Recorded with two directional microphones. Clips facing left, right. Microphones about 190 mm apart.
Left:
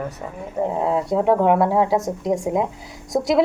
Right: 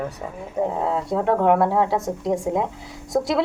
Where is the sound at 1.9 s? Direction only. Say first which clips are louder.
Left 2 dB; 20° left (ahead or behind).